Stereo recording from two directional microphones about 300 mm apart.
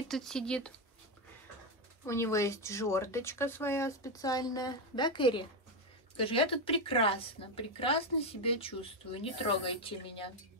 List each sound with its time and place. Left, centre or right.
0.1 s speech: centre
2.0 s speech: centre